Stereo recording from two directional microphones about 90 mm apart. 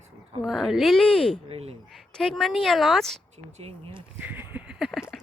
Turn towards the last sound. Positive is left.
turn(degrees=5)  # may be behind; listen again after turning